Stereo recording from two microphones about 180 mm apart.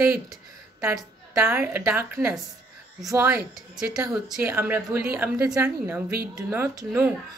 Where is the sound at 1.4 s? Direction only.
10° right (ahead or behind).